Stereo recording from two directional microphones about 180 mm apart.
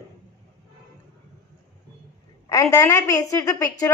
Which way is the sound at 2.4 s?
15° left (ahead or behind).